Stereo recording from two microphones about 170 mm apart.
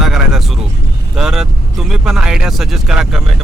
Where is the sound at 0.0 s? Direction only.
Centre (ahead or behind).